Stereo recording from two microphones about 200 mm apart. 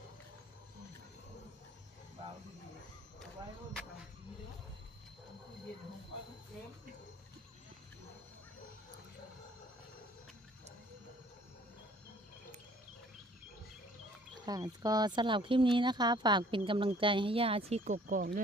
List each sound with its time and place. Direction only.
14.4 s speech: 20° right (ahead or behind); by 18.4 s 50° right (ahead or behind)